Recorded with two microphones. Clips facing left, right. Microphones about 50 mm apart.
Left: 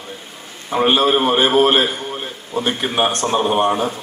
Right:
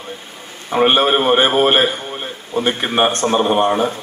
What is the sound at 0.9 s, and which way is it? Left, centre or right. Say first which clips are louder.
A man's voice: right 1 dB; right.